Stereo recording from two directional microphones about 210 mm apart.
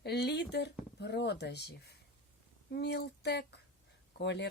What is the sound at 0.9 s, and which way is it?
Speech, 55° left (ahead or behind).